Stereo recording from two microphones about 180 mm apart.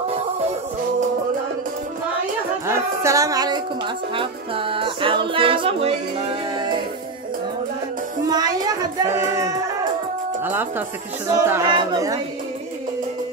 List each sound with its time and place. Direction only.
2.6 s music: 15° right (ahead or behind); by 5.9 s 35° right (ahead or behind)
8.3 s music: 20° right (ahead or behind)